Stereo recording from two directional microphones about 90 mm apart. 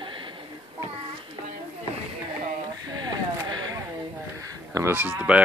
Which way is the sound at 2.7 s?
50° right (ahead or behind).